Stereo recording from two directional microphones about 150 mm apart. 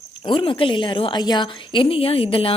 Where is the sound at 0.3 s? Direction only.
35° left (ahead or behind).